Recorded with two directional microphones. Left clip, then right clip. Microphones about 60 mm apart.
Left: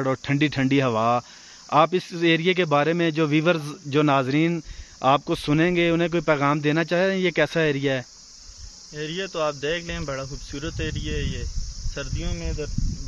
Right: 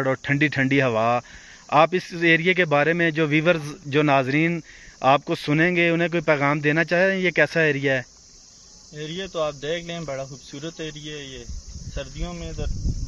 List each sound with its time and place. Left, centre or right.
0.0 s a man's voice: left
8.9 s speech: left